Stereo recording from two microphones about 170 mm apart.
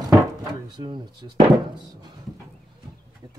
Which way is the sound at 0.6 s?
25° right (ahead or behind).